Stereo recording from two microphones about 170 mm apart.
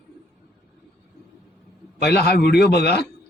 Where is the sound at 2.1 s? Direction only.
70° left (ahead or behind).